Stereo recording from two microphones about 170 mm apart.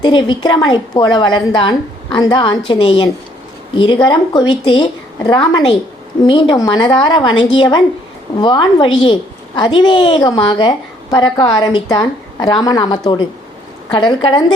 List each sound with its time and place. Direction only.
0.0 s a woman's voice: 25° left (ahead or behind)